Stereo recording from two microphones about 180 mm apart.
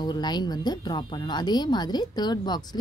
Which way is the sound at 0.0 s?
25° left (ahead or behind).